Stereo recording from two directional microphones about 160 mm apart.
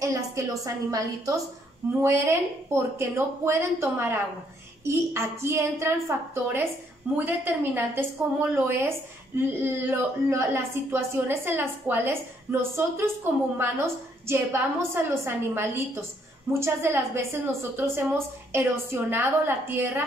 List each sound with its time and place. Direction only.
0.0 s a woman's voice: 20° right (ahead or behind)